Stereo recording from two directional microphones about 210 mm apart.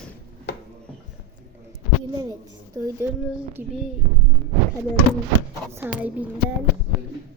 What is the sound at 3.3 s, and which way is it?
Child singing, 5° right (ahead or behind).